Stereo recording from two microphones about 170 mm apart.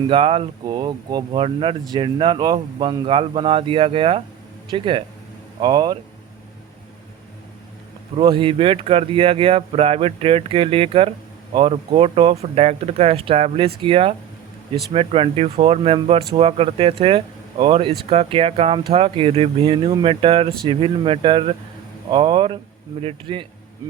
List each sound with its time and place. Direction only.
0.1 s speech: 30° right (ahead or behind)
8.1 s speech: 30° right (ahead or behind)